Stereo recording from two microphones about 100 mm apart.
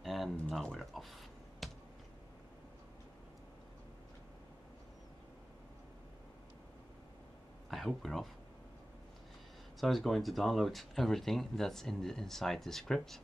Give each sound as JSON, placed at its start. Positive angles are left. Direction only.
{"t": 0.0, "sound": "a sound", "side_deg": 0}
{"t": 7.7, "sound": "speech", "side_deg": 0}
{"t": 9.8, "sound": "speech", "side_deg": 0}